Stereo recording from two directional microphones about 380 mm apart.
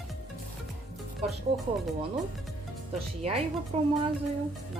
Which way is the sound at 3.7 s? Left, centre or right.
Centre.